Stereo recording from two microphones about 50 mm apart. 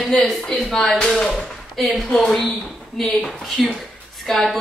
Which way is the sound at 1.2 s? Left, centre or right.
Centre.